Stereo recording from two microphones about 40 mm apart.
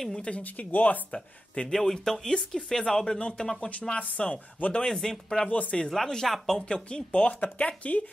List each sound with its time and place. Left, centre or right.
0.1 s speech: left
0.4 s speech: left
1.1 s speech: left
1.7 s speech: centre
3.9 s speech: left
4.7 s speech: centre
5.5 s speech: left
5.9 s speech: centre
6.6 s speech: left